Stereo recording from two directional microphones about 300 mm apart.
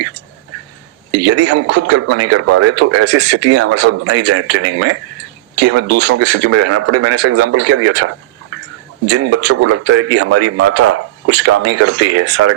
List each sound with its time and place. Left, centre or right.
1.2 s speech: right